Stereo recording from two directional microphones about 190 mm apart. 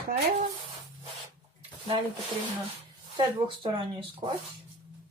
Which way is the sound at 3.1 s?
25° right (ahead or behind).